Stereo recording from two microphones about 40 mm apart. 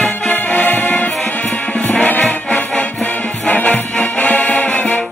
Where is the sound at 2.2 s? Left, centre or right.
Left.